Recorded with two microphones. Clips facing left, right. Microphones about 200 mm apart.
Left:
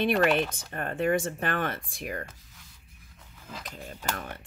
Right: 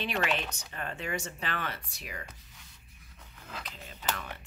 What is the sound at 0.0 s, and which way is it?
Speech, 50° left (ahead or behind).